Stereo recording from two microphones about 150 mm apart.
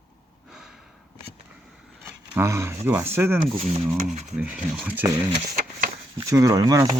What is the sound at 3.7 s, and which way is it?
Speech, 50° right (ahead or behind).